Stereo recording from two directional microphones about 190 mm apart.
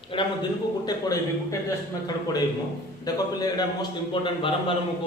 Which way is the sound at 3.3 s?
20° left (ahead or behind).